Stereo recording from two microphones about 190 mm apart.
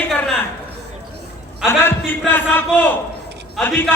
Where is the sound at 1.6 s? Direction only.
10° left (ahead or behind).